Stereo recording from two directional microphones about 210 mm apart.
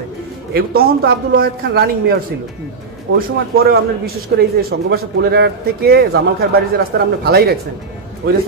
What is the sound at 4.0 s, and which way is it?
Speech, 45° right (ahead or behind).